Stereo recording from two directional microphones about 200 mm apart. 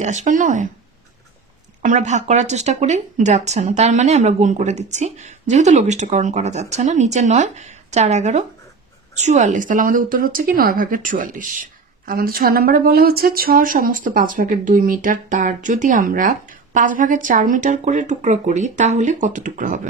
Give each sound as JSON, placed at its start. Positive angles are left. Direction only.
{"t": 0.0, "sound": "speech", "side_deg": -35}
{"t": 1.8, "sound": "speech", "side_deg": -35}